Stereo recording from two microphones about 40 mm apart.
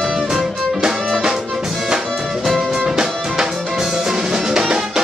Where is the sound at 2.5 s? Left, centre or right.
Centre.